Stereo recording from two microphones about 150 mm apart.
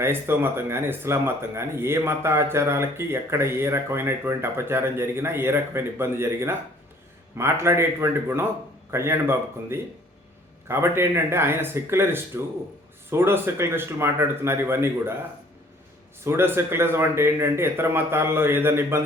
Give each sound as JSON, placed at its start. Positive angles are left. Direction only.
{"t": 0.0, "sound": "speech", "side_deg": -15}
{"t": 16.2, "sound": "speech", "side_deg": -15}